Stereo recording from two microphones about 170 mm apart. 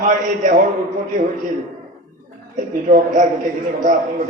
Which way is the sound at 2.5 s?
50° right (ahead or behind).